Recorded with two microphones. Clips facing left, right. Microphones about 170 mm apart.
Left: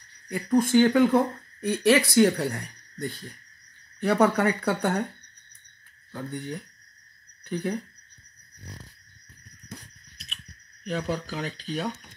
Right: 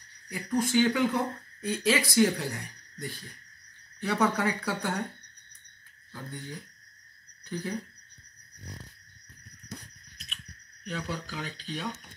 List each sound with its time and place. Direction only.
0.3 s a woman's voice: 55° left (ahead or behind)
6.1 s a woman's voice: 65° left (ahead or behind)
10.9 s speech: 45° left (ahead or behind)